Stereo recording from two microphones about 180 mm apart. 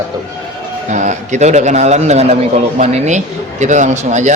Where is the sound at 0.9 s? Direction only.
40° right (ahead or behind).